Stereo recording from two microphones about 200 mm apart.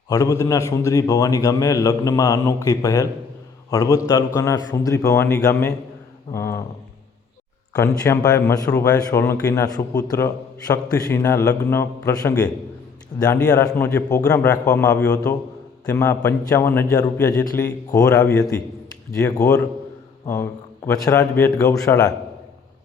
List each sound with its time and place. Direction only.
0.1 s speech: 20° left (ahead or behind)
7.7 s speech: 15° left (ahead or behind)